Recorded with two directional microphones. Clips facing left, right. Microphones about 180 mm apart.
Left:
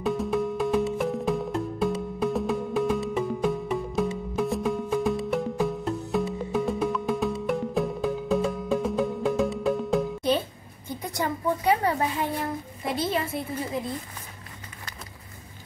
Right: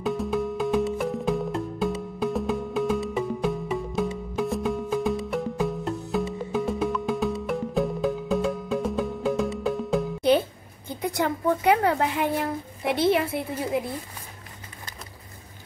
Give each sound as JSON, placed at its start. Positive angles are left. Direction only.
{"t": 0.0, "sound": "music", "side_deg": 0}
{"t": 11.1, "sound": "a woman's voice", "side_deg": -65}
{"t": 13.3, "sound": "a woman's voice", "side_deg": -10}